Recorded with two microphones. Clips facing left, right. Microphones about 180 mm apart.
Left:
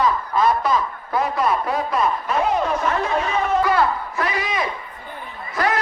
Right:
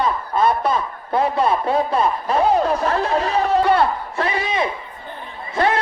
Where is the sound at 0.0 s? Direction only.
30° right (ahead or behind).